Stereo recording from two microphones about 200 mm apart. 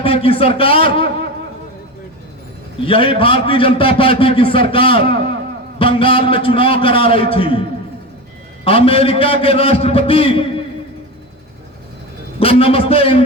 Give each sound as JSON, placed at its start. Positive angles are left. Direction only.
{"t": 0.0, "sound": "a man's voice", "side_deg": 30}
{"t": 2.8, "sound": "a man's voice", "side_deg": 25}
{"t": 8.6, "sound": "a man's voice", "side_deg": 30}
{"t": 12.4, "sound": "a man's voice", "side_deg": 30}